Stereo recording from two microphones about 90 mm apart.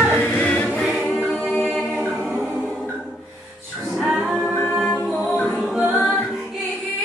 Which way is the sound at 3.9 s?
5° right (ahead or behind).